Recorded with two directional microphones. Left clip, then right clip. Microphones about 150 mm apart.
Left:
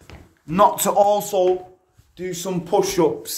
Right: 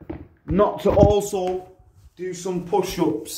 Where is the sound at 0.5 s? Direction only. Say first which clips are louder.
Left 3 dB; 90° left.